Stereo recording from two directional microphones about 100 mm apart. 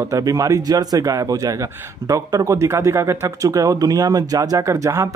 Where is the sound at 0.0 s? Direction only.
35° right (ahead or behind).